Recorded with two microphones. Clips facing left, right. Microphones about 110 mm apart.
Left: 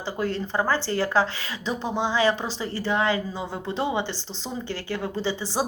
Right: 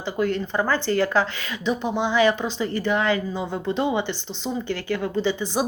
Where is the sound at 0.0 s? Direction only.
30° left (ahead or behind).